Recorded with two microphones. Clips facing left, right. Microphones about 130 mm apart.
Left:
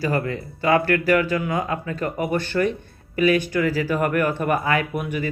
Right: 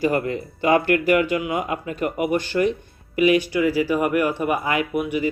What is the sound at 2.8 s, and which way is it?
Music, 15° right (ahead or behind).